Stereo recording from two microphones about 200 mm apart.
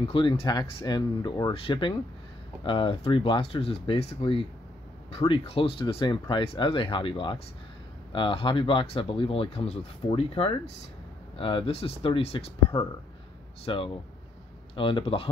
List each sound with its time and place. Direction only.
0.1 s speech: 25° left (ahead or behind)